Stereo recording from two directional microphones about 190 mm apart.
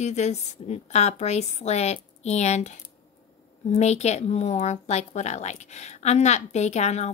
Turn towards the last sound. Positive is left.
turn(degrees=35)  # may be behind; listen again after turning